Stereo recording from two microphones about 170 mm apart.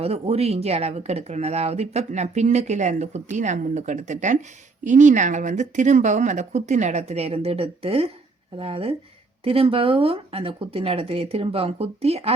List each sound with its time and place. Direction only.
0.0 s speech: 35° right (ahead or behind)